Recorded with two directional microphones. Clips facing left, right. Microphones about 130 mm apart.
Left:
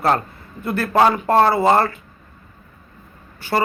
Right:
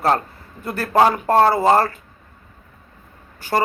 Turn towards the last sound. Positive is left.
turn(degrees=-40)  # may be behind; listen again after turning